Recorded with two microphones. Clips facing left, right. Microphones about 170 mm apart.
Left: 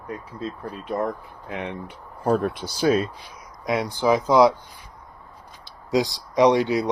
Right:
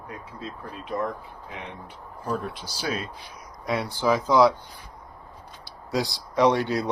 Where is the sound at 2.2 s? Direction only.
65° left (ahead or behind); by 3.0 s 50° left (ahead or behind).